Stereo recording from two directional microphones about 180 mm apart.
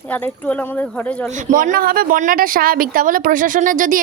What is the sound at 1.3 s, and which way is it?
Speech, 45° right (ahead or behind).